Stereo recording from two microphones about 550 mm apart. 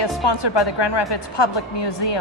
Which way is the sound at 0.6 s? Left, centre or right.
Left.